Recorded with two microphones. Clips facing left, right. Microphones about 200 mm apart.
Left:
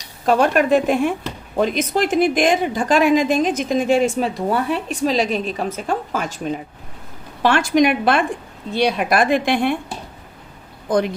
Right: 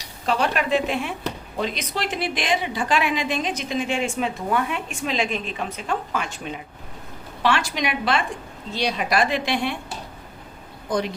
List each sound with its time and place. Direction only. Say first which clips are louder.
0.3 s a woman's voice: left 7 dB; 45° left (ahead or behind)
7.4 s a woman's voice: left 8 dB; 50° left (ahead or behind)
10.8 s speech: left 6 dB; 50° left (ahead or behind)